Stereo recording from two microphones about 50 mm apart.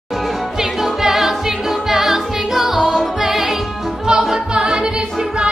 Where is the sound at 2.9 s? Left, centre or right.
Centre.